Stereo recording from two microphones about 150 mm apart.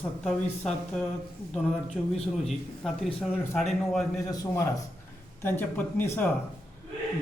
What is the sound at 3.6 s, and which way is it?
Speech, centre (ahead or behind).